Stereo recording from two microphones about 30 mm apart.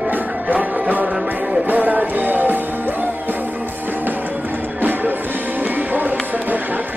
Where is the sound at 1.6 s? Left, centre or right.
Right.